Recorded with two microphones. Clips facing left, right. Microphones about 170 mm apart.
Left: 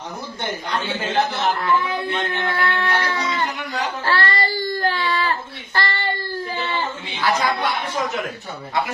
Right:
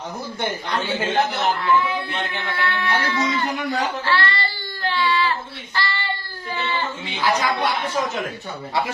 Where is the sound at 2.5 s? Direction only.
40° left (ahead or behind).